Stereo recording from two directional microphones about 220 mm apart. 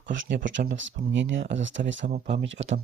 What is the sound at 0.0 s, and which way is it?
Speech, 55° right (ahead or behind).